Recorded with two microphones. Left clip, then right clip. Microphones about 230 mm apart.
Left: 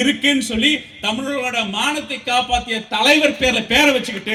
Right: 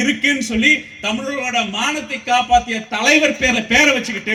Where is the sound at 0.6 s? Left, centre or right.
Left.